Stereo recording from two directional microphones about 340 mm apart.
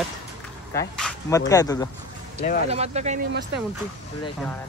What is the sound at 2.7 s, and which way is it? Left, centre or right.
Speech, centre.